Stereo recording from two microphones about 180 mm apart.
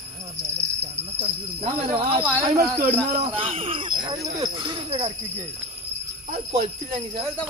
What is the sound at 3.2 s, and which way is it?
Speech, 30° right (ahead or behind).